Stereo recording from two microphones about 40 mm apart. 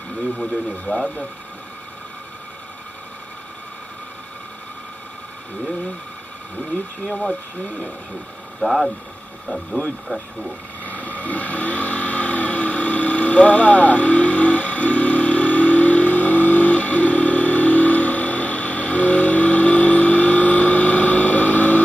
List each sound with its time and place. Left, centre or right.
0.4 s speech: centre
8.5 s speech: centre
10.0 s speech: centre
11.1 s vehicle: left